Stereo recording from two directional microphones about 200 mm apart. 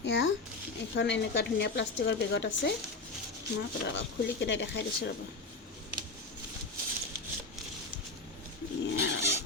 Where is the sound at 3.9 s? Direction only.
65° left (ahead or behind).